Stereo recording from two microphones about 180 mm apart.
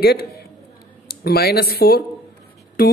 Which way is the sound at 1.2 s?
60° left (ahead or behind).